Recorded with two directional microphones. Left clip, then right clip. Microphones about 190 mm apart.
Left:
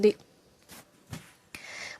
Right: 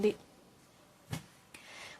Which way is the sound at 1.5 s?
35° left (ahead or behind).